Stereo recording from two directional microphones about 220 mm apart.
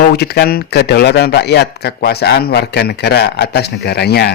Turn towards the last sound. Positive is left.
turn(degrees=45)  # may be behind; listen again after turning